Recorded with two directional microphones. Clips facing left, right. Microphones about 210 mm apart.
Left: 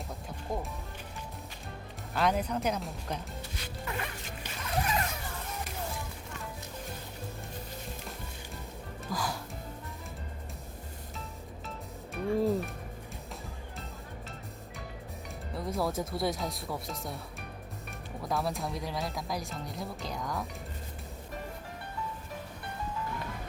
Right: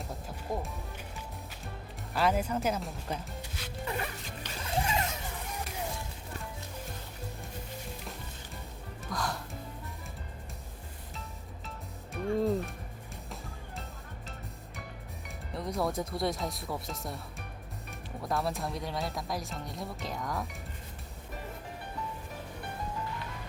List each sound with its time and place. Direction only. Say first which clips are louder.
0.5 s music: even; centre (ahead or behind)
2.1 s speech: even; centre (ahead or behind)
4.5 s music: even; 30° right (ahead or behind)
9.0 s music: even; centre (ahead or behind)
12.1 s music: left 1 dB; centre (ahead or behind)
15.5 s speech: even; centre (ahead or behind)
18.2 s speech: even; centre (ahead or behind)